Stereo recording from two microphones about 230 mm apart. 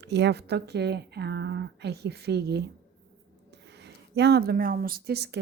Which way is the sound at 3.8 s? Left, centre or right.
Right.